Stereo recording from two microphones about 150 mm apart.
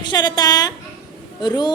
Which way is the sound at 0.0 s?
30° left (ahead or behind).